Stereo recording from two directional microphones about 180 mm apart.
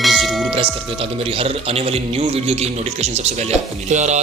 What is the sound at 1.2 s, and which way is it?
A man's voice, 35° right (ahead or behind).